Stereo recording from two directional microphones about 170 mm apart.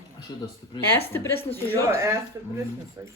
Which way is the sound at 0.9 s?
15° left (ahead or behind).